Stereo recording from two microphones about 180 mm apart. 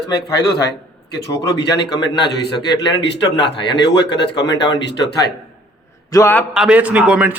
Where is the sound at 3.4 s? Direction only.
70° left (ahead or behind).